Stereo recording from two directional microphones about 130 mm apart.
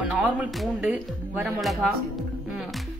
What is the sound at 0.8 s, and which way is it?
Speech, 10° right (ahead or behind).